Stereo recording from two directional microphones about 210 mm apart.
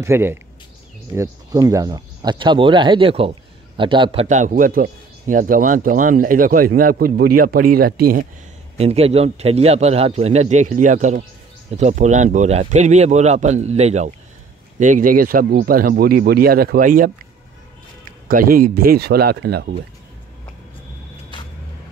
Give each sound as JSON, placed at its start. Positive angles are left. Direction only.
{"t": 0.0, "sound": "speech", "side_deg": -10}
{"t": 8.7, "sound": "speech", "side_deg": -30}
{"t": 18.3, "sound": "speech", "side_deg": -40}